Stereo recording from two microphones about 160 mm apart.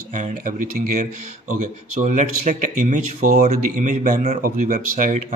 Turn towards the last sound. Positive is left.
turn(degrees=-55)  # may be behind; listen again after turning